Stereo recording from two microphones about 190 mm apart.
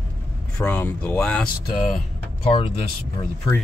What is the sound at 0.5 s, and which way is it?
Speech, 10° left (ahead or behind).